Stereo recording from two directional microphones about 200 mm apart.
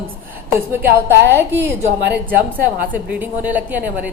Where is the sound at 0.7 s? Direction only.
10° right (ahead or behind).